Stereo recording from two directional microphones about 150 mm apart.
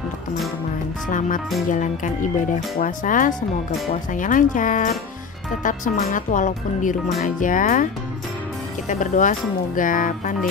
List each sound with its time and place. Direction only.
1.0 s speech: 60° left (ahead or behind)
5.6 s speech: 75° left (ahead or behind)